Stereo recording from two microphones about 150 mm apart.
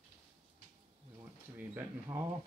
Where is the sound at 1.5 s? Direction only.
15° right (ahead or behind).